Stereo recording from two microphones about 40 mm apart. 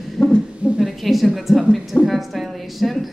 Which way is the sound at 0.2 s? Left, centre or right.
Left.